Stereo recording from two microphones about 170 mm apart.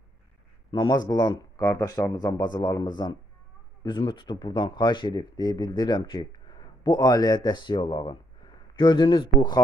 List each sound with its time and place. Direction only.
0.7 s speech: 20° left (ahead or behind)